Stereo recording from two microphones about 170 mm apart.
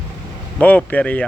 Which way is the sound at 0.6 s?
10° left (ahead or behind).